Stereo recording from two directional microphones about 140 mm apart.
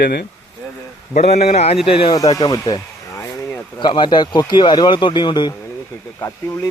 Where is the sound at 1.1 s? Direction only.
50° left (ahead or behind).